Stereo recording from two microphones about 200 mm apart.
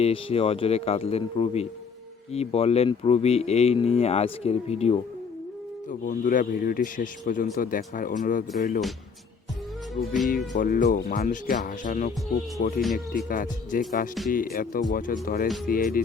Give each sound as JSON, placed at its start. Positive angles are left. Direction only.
{"t": 0.0, "sound": "a man's voice", "side_deg": 30}
{"t": 5.9, "sound": "a man's voice", "side_deg": 40}
{"t": 10.5, "sound": "a man's voice", "side_deg": 40}
{"t": 12.8, "sound": "speech", "side_deg": 0}
{"t": 13.2, "sound": "speech", "side_deg": 45}